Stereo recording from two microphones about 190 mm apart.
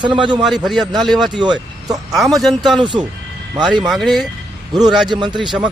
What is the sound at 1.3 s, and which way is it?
Speech, 25° right (ahead or behind).